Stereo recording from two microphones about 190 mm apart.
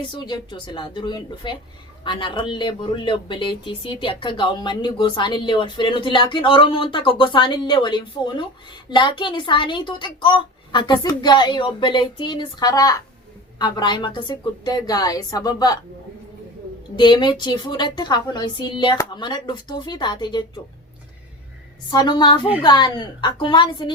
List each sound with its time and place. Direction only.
0.2 s speech: 25° left (ahead or behind)
17.0 s speech: 25° left (ahead or behind)
21.8 s speech: 25° left (ahead or behind)